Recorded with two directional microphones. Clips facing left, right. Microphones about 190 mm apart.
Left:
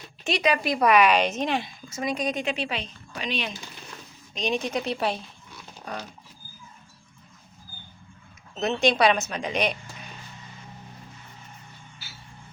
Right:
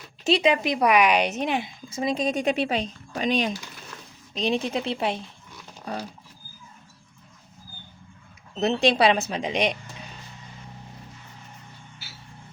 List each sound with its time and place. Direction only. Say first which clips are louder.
0.3 s a woman's voice: right 3 dB; 25° right (ahead or behind)
2.0 s speech: right 3 dB; 25° right (ahead or behind)
2.4 s a woman's voice: right 5 dB; 45° right (ahead or behind)
4.4 s speech: right 2 dB; 30° right (ahead or behind)
5.8 s a sound: right 3 dB; 30° right (ahead or behind)
8.5 s speech: right 2 dB; 30° right (ahead or behind)